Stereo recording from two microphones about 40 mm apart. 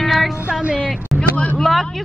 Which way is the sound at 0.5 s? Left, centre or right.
Right.